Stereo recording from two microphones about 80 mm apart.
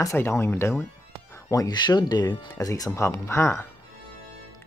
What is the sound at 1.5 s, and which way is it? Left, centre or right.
Speech, left.